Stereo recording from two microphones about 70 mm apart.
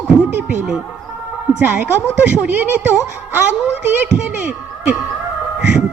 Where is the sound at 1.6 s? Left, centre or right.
Right.